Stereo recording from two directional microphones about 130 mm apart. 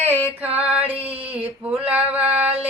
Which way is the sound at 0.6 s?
10° right (ahead or behind).